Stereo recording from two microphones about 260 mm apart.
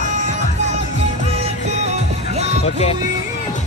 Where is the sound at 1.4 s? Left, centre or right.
Right.